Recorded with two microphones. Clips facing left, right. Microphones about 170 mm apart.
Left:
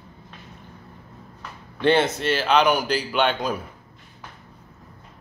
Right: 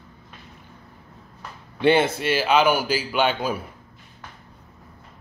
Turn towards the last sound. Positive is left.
turn(degrees=-5)  # may be behind; listen again after turning